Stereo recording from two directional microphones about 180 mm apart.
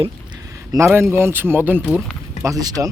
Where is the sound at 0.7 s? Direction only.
15° right (ahead or behind).